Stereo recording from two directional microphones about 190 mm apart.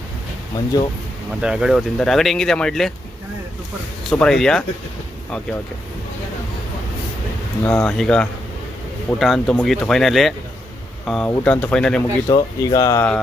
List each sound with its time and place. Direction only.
0.5 s speech: 20° left (ahead or behind)
1.4 s speech: 5° right (ahead or behind)
4.1 s speech: 5° left (ahead or behind)
7.6 s speech: 5° left (ahead or behind)
12.3 s speech: 20° left (ahead or behind)